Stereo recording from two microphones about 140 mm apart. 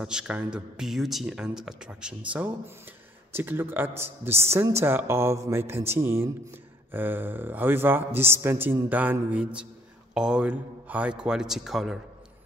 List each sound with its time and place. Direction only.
0.0 s a man's voice: 5° right (ahead or behind)